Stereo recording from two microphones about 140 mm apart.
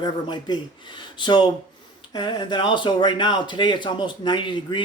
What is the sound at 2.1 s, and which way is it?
Speech, 30° left (ahead or behind).